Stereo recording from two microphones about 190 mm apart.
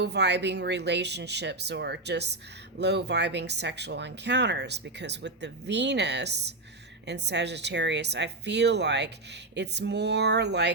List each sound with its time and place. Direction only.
0.0 s speech: 65° right (ahead or behind)